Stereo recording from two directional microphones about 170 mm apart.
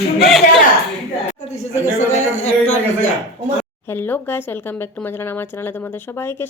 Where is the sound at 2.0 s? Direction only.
45° left (ahead or behind).